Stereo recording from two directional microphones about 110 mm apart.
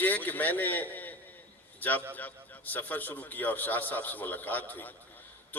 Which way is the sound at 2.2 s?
15° left (ahead or behind).